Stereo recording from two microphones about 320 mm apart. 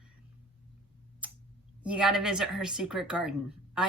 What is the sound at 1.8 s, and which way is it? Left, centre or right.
Speech, centre.